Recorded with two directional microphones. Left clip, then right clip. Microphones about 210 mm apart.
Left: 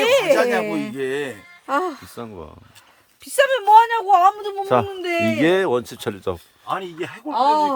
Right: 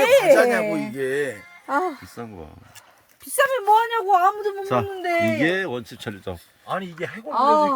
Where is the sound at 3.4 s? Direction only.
5° left (ahead or behind).